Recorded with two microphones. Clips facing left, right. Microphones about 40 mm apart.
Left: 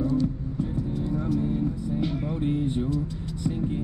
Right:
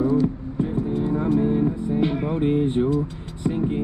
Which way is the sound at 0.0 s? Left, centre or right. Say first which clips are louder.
Right 5 dB; centre.